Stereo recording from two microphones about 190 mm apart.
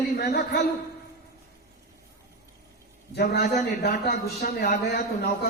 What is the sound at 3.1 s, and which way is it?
A man's voice, 55° left (ahead or behind).